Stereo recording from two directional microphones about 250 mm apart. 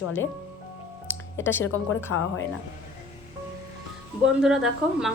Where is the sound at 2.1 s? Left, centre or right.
Left.